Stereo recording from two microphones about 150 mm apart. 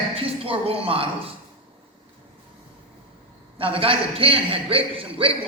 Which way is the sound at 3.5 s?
35° right (ahead or behind).